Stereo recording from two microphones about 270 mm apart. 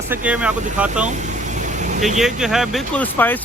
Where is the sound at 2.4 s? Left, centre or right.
Centre.